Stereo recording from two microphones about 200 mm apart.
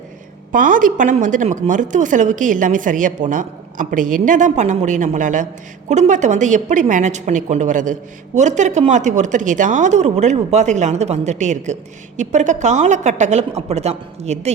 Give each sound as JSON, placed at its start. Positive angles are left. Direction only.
{"t": 0.5, "sound": "a woman's voice", "side_deg": -40}